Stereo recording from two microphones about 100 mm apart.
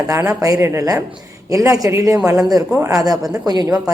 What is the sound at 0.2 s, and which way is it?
Speech, 30° right (ahead or behind).